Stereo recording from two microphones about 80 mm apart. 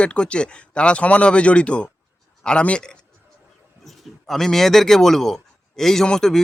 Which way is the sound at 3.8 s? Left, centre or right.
Centre.